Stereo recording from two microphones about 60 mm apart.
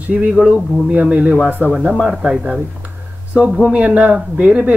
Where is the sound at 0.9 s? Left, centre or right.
Right.